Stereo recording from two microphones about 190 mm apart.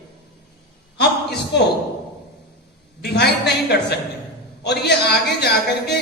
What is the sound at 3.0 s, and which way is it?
Speech, 60° left (ahead or behind).